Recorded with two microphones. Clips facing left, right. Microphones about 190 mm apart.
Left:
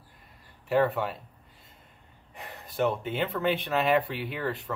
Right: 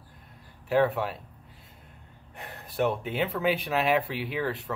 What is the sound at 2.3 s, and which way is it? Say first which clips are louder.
Speech: right 1 dB; centre (ahead or behind).